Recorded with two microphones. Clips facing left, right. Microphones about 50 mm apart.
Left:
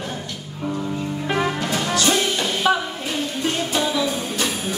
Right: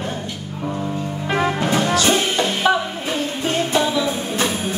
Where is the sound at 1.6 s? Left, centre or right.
Right.